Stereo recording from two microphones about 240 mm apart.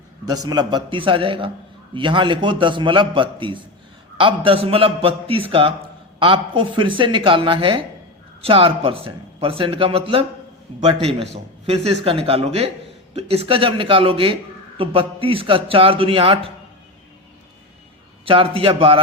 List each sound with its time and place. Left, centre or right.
0.4 s speech: centre
11.6 s speech: right
18.3 s speech: right